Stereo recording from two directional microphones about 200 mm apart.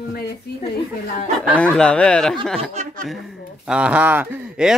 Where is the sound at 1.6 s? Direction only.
5° left (ahead or behind).